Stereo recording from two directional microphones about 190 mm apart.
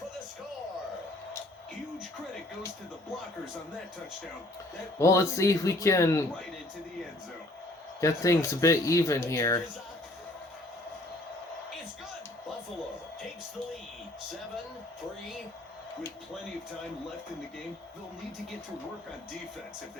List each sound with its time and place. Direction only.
4.9 s speech: 15° left (ahead or behind)
8.0 s speech: 15° left (ahead or behind)